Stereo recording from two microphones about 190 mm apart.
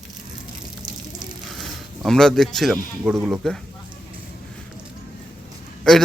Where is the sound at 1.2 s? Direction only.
Centre (ahead or behind).